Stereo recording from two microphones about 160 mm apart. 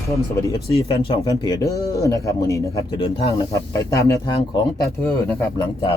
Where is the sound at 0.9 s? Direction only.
35° left (ahead or behind); by 2.8 s 20° left (ahead or behind).